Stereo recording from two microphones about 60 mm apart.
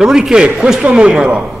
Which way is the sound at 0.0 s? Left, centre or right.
Centre.